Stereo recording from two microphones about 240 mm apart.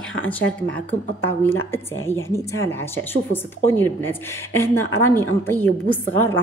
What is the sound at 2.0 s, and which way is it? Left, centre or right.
A woman's voice, centre.